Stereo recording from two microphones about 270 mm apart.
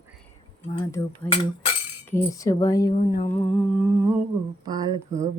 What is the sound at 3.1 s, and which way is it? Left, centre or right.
Humming, left.